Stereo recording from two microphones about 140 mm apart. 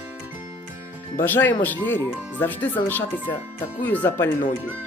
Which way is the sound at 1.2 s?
15° left (ahead or behind).